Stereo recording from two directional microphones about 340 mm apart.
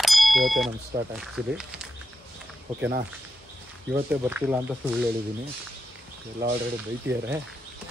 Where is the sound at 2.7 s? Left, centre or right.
Centre.